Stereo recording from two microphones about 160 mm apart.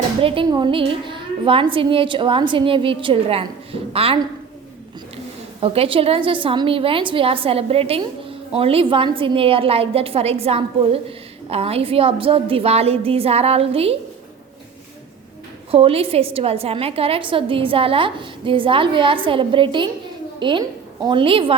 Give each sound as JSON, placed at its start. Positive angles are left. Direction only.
{"t": 0.2, "sound": "a woman's voice", "side_deg": -35}
{"t": 15.7, "sound": "a woman's voice", "side_deg": -35}